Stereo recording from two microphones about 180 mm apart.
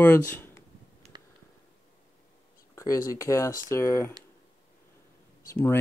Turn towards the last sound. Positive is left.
turn(degrees=10)  # may be behind; listen again after turning